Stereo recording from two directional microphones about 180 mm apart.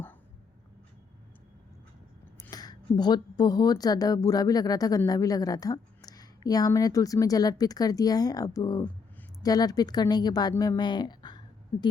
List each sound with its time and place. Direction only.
2.5 s a woman's voice: 20° left (ahead or behind)